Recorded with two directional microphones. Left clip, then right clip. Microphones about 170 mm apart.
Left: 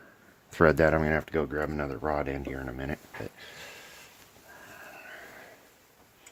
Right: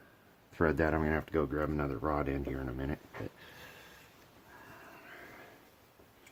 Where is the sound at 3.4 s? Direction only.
40° left (ahead or behind).